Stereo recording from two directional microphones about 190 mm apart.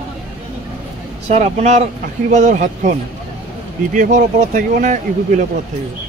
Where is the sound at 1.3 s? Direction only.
35° right (ahead or behind).